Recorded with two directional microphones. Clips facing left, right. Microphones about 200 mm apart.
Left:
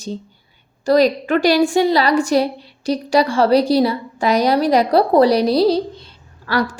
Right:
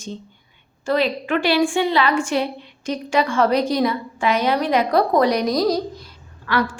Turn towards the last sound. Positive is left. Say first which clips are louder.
# left 2 dB
turn(degrees=40)  # may be behind; listen again after turning